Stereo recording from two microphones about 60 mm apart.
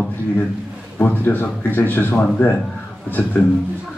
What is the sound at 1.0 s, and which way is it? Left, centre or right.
A man's voice, left.